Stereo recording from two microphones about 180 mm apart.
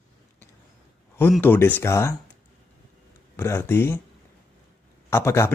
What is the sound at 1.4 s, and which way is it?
Speech, 10° left (ahead or behind).